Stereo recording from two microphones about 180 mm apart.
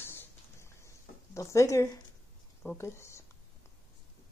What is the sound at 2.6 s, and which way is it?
Speech, 15° left (ahead or behind).